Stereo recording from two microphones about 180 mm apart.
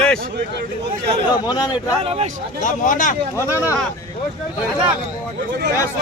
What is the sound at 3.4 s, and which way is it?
Speech, 15° left (ahead or behind).